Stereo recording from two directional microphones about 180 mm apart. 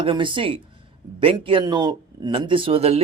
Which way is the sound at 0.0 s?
30° right (ahead or behind).